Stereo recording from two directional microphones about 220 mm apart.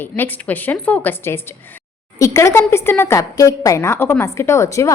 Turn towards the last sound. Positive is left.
turn(degrees=15)  # may be behind; listen again after turning